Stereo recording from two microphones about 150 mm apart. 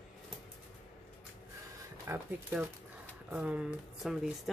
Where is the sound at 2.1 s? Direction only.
15° right (ahead or behind).